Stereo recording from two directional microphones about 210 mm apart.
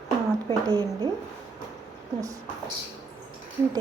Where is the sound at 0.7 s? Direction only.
20° right (ahead or behind).